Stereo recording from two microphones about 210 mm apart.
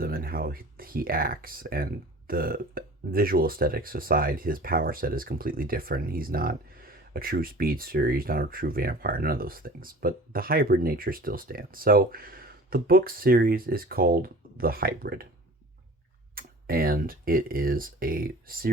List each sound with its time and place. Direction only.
0.0 s speech: 45° right (ahead or behind)
16.3 s speech: 45° right (ahead or behind)